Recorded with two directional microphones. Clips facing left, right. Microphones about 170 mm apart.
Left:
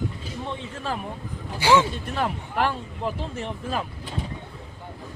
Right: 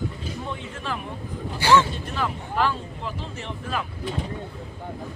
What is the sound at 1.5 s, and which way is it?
Speech, 15° left (ahead or behind).